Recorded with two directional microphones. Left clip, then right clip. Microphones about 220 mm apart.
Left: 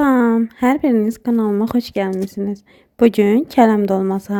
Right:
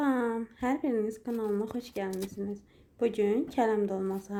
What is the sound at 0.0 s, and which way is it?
Speech, 45° left (ahead or behind).